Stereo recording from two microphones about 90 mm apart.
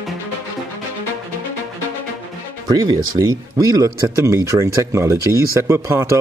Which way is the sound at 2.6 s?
50° right (ahead or behind).